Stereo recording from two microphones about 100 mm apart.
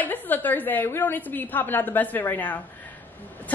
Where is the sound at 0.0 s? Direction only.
20° left (ahead or behind).